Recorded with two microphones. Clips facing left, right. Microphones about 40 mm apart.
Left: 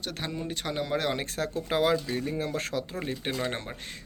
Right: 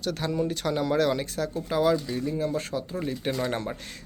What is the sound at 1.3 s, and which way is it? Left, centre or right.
Speech, left.